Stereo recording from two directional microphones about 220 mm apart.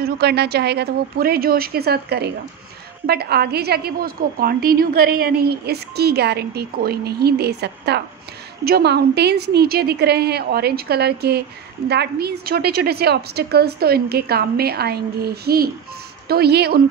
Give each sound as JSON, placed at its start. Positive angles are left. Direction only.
{"t": 0.0, "sound": "a woman's voice", "side_deg": -45}